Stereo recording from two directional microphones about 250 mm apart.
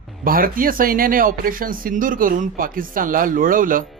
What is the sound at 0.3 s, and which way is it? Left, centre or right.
Speech, right.